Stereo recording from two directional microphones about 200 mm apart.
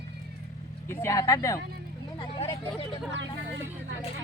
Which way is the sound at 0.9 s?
15° left (ahead or behind).